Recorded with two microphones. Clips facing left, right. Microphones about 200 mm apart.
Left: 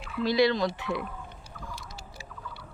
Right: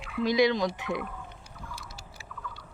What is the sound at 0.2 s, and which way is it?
Speech, 15° right (ahead or behind).